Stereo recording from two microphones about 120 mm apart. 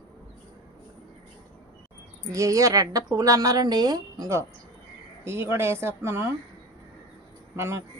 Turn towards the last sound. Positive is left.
turn(degrees=-20)  # may be behind; listen again after turning